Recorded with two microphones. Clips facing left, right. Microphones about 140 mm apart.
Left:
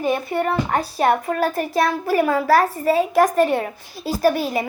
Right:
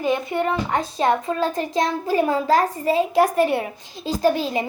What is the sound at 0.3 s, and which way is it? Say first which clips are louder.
Speech: left 1 dB; 55° left (ahead or behind).